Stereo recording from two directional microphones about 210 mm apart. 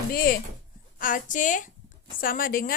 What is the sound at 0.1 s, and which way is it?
A woman's voice, 45° left (ahead or behind).